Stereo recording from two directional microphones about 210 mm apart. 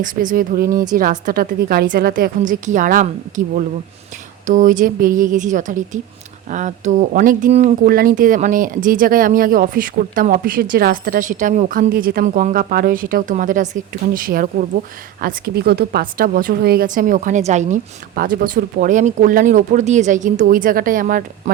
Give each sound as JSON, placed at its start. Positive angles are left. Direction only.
{"t": 0.0, "sound": "speech", "side_deg": -40}